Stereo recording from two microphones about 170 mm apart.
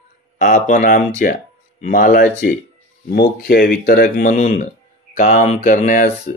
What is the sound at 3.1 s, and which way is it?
Speech, 65° left (ahead or behind).